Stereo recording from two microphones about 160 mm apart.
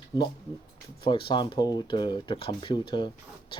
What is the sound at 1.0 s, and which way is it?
Speech, 30° left (ahead or behind).